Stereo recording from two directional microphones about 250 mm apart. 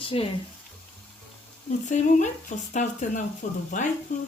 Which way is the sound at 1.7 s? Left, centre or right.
Left.